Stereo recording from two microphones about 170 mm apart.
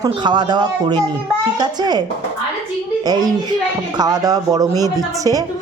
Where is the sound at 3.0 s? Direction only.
25° right (ahead or behind).